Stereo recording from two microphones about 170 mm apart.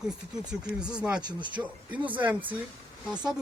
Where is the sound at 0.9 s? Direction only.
5° right (ahead or behind).